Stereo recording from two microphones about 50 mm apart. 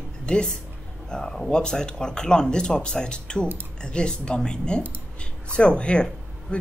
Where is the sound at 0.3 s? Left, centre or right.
Centre.